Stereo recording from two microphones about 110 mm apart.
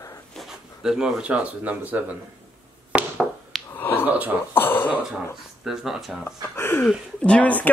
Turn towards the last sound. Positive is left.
turn(degrees=15)  # may be behind; listen again after turning